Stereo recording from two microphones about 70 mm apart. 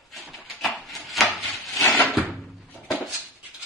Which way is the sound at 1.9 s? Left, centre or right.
Left.